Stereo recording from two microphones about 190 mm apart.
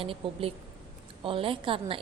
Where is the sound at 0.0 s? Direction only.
30° right (ahead or behind).